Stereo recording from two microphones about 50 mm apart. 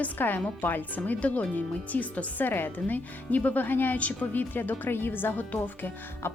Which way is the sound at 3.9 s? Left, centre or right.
Left.